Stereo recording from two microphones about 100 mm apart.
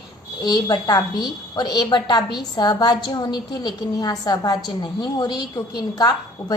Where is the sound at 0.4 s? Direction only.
45° left (ahead or behind).